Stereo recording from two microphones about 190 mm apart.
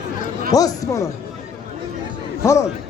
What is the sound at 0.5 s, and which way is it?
Speech, 20° left (ahead or behind).